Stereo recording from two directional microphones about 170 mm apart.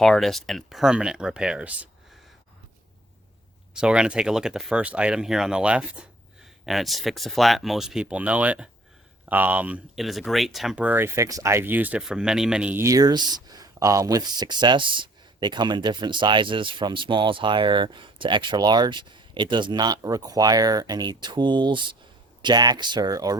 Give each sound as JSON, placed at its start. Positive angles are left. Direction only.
{"t": 0.0, "sound": "speech", "side_deg": 0}
{"t": 3.8, "sound": "speech", "side_deg": -5}